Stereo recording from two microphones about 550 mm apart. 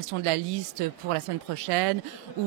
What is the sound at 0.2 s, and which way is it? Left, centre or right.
A woman's voice, right.